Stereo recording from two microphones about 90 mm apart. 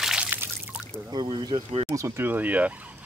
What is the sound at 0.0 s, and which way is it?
Trickle, 5° right (ahead or behind).